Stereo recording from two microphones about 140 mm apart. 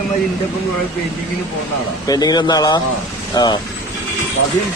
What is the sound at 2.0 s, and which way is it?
Speech, 25° left (ahead or behind).